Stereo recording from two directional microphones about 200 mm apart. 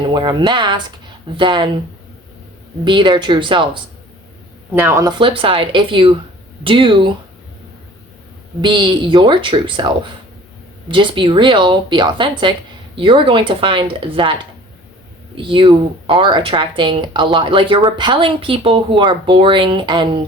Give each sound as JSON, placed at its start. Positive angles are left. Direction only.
{"t": 0.0, "sound": "speech", "side_deg": -25}
{"t": 2.8, "sound": "speech", "side_deg": -25}
{"t": 4.7, "sound": "speech", "side_deg": -10}
{"t": 8.6, "sound": "speech", "side_deg": -25}
{"t": 15.4, "sound": "speech", "side_deg": -25}